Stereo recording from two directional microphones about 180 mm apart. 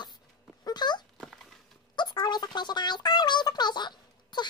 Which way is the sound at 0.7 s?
25° left (ahead or behind).